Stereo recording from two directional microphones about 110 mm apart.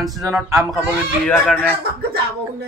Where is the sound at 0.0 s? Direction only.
Centre (ahead or behind).